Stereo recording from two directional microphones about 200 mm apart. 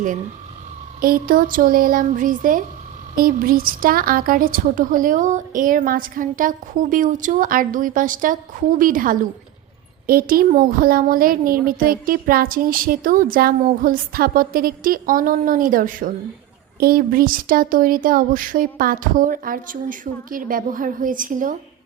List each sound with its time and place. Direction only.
1.0 s a woman's voice: 45° right (ahead or behind)